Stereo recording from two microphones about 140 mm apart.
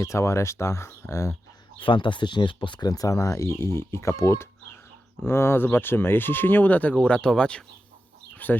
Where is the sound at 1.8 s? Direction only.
35° left (ahead or behind).